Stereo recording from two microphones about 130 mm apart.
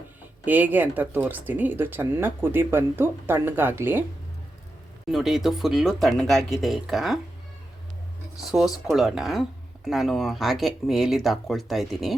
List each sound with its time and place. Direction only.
0.4 s speech: 15° right (ahead or behind)
5.0 s speech: centre (ahead or behind)
8.4 s speech: 5° right (ahead or behind)